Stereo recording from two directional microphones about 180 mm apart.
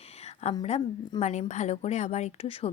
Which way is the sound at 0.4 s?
40° left (ahead or behind).